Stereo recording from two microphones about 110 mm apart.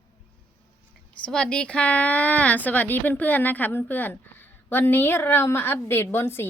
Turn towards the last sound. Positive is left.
turn(degrees=20)  # may be behind; listen again after turning